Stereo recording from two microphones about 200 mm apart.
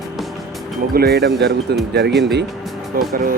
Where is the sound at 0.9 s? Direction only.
55° right (ahead or behind).